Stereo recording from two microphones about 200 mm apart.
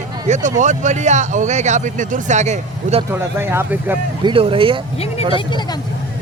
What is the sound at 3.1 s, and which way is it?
Speech, 10° right (ahead or behind).